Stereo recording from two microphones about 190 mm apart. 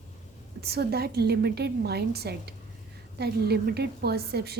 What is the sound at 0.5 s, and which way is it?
A woman's voice, 55° right (ahead or behind).